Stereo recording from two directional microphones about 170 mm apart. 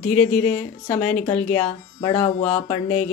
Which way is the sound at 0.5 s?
35° left (ahead or behind).